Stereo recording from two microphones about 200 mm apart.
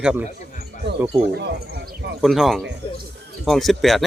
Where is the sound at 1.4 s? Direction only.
50° right (ahead or behind).